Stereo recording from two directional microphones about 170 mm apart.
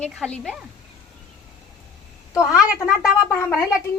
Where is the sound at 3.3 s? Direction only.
15° left (ahead or behind).